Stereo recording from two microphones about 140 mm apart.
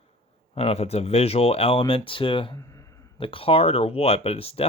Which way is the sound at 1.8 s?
35° left (ahead or behind).